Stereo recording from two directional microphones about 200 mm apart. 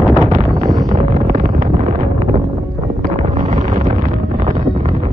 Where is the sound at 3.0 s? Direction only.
35° right (ahead or behind).